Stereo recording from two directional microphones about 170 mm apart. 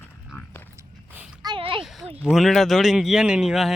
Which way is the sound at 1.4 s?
30° right (ahead or behind).